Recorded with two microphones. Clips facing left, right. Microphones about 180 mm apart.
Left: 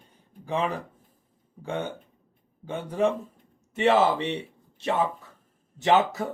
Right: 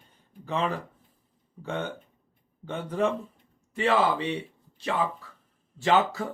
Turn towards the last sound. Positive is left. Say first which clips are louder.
# left 2 dB
turn(degrees=20)  # may be behind; listen again after turning